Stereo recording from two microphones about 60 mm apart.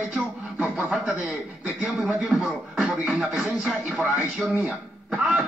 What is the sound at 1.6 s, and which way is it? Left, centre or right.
Speech, centre.